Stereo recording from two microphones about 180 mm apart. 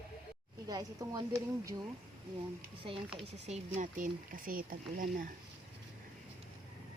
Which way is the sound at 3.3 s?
40° right (ahead or behind).